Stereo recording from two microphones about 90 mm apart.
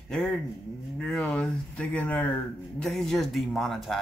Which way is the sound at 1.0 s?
10° left (ahead or behind).